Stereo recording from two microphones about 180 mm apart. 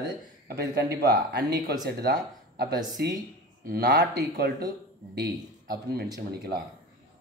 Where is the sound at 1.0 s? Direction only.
65° right (ahead or behind).